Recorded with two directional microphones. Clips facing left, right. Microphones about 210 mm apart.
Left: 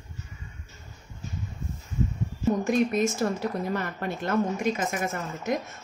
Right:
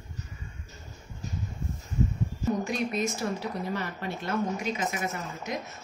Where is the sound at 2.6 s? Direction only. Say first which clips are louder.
Left 6 dB; 50° left (ahead or behind).